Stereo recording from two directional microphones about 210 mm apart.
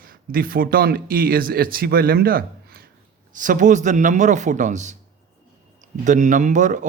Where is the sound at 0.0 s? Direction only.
45° right (ahead or behind).